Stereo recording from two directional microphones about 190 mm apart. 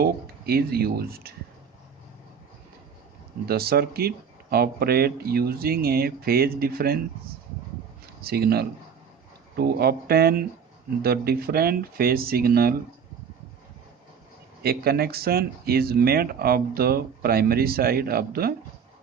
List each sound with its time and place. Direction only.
0.0 s speech: 55° right (ahead or behind)
3.4 s speech: 55° right (ahead or behind)
8.2 s speech: 55° right (ahead or behind)
14.6 s speech: 55° right (ahead or behind)